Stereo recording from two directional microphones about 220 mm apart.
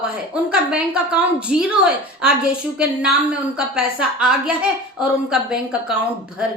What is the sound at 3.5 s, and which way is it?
A woman's voice, 5° right (ahead or behind).